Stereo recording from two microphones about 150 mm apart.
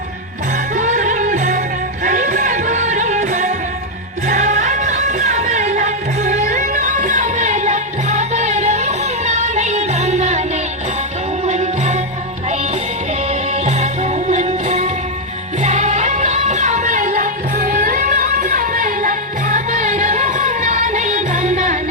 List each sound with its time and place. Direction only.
0.8 s music: 55° right (ahead or behind)
11.4 s music: 50° right (ahead or behind)
13.5 s music: 50° right (ahead or behind)